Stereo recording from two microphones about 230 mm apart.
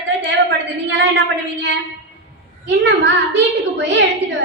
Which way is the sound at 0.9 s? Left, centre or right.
Right.